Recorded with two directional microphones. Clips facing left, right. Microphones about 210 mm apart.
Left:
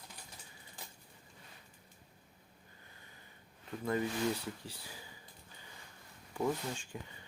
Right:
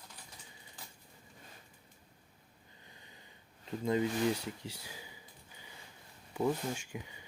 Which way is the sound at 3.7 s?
20° right (ahead or behind).